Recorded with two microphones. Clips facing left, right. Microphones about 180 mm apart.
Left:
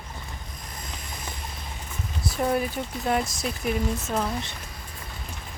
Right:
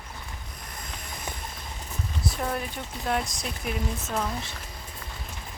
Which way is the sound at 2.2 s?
5° left (ahead or behind).